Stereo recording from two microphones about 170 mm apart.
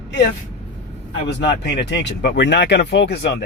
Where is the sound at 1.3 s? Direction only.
85° left.